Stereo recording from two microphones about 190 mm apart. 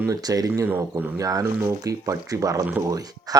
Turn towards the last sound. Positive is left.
turn(degrees=-20)  # may be behind; listen again after turning